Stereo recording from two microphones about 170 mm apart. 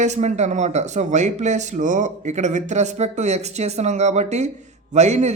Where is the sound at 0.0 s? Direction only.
45° right (ahead or behind).